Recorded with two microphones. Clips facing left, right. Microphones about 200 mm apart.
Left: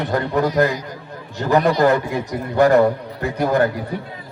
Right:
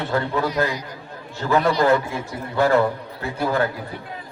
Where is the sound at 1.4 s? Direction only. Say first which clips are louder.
Left 3 dB; 15° left (ahead or behind).